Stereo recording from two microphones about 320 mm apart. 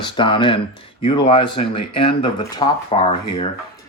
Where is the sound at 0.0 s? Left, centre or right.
Centre.